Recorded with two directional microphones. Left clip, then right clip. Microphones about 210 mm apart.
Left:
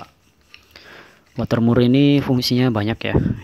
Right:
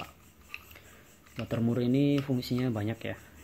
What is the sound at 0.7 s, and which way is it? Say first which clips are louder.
Speech: left 13 dB; 30° left (ahead or behind).